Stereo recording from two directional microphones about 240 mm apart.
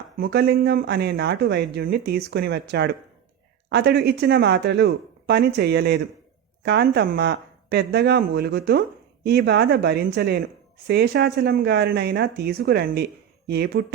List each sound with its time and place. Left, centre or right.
0.2 s speech: right